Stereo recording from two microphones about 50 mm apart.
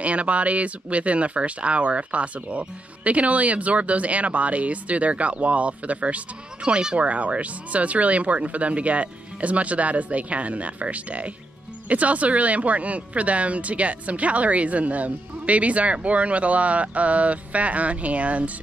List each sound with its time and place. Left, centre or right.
0.0 s speech: right